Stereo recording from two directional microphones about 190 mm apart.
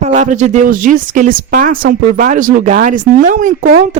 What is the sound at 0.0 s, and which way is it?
Speech, 35° right (ahead or behind).